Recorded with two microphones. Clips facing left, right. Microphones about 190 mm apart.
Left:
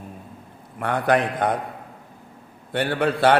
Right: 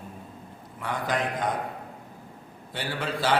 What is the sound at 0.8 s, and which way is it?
Speech, 60° left (ahead or behind).